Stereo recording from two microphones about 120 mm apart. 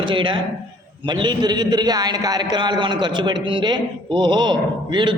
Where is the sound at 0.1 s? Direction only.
40° right (ahead or behind).